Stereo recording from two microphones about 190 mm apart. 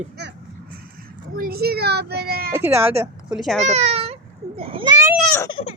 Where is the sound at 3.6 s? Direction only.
35° right (ahead or behind).